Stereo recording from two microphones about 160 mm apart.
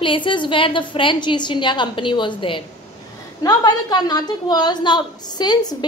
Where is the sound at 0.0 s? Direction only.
30° left (ahead or behind).